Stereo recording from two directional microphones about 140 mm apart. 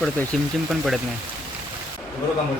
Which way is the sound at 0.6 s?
5° right (ahead or behind).